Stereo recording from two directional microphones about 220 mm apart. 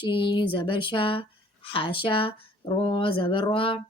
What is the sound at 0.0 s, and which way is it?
Speech, 20° left (ahead or behind).